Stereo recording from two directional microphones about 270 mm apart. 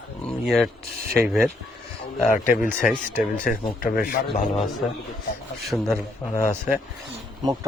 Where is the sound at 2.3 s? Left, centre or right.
Left.